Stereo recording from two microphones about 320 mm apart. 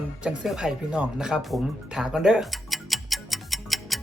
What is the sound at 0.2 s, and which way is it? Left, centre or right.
Music, centre.